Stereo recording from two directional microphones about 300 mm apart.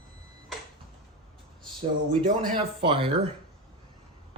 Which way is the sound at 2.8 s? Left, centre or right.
Centre.